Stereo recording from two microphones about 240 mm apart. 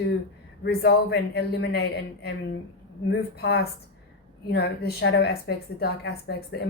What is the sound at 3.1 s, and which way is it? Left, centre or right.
A woman's voice, left.